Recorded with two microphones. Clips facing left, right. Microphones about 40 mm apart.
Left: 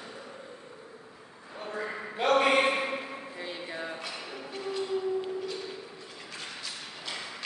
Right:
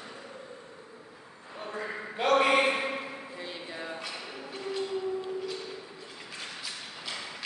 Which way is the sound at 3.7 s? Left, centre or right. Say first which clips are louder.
Left 1 dB; centre.